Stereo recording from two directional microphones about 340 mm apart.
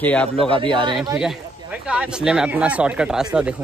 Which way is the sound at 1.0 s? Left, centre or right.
Centre.